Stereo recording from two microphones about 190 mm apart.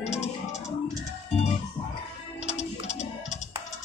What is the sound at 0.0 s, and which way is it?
Music, 35° left (ahead or behind).